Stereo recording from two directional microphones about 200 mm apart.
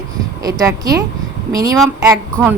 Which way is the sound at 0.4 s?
15° right (ahead or behind).